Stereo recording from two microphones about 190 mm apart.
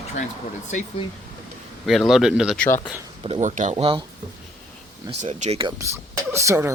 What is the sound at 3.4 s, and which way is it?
Speech, 40° right (ahead or behind).